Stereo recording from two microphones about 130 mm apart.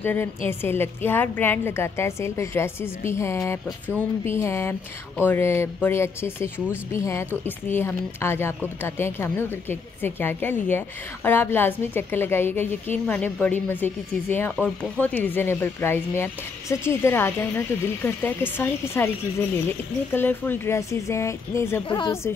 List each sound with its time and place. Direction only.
0.0 s a woman's voice: 15° left (ahead or behind)
21.8 s a woman's voice: 35° left (ahead or behind)